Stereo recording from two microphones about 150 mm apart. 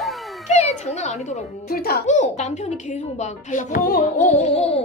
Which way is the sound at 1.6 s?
90° left.